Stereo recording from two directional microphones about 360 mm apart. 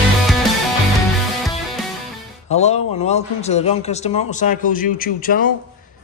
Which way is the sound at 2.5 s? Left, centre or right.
Centre.